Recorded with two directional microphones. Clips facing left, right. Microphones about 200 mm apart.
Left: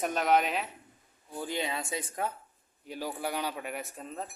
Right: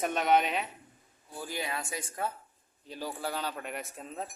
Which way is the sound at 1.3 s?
20° left (ahead or behind).